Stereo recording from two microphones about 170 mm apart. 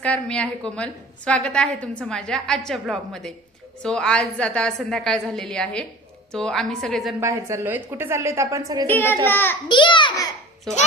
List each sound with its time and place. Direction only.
0.0 s a woman's voice: 5° left (ahead or behind)
7.2 s a woman's voice: 15° right (ahead or behind)
8.9 s a child's voice: 10° left (ahead or behind)
9.6 s a child's voice: 30° left (ahead or behind)